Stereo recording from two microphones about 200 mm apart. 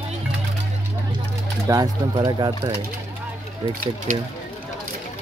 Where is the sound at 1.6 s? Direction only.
20° right (ahead or behind).